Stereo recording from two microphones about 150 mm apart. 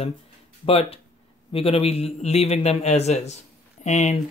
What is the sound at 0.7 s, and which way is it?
A man's voice, 40° left (ahead or behind).